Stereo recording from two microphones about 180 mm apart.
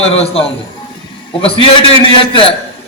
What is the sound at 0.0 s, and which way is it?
A man's voice, 35° left (ahead or behind).